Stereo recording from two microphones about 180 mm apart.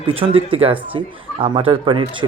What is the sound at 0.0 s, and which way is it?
A man's voice, 30° right (ahead or behind).